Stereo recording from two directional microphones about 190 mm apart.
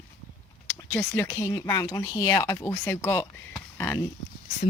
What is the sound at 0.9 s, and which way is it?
Speech, 10° left (ahead or behind).